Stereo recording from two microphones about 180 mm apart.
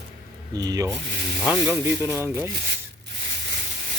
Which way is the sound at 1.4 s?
5° right (ahead or behind).